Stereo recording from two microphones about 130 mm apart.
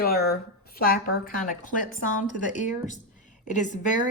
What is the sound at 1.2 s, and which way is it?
Speech, 90° left.